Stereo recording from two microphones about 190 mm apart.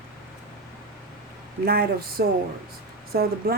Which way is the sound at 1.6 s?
55° right (ahead or behind).